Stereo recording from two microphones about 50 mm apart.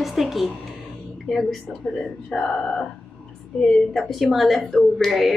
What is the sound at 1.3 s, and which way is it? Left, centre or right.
Speech, centre.